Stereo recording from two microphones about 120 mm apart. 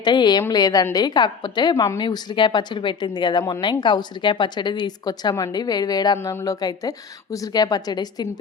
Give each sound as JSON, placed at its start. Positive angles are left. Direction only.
{"t": 0.0, "sound": "a woman's voice", "side_deg": 40}